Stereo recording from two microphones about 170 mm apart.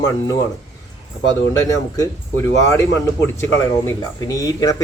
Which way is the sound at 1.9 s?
15° left (ahead or behind).